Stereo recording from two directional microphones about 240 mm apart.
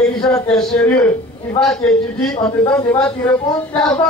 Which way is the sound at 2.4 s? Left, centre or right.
Centre.